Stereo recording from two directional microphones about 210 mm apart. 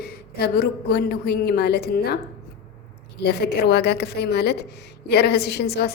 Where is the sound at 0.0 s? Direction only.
50° left (ahead or behind).